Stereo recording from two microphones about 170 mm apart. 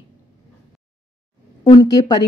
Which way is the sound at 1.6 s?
25° left (ahead or behind).